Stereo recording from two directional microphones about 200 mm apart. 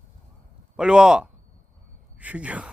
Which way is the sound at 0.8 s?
5° right (ahead or behind).